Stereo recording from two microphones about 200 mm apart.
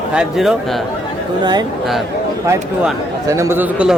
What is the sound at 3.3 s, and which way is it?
Speech, 15° right (ahead or behind).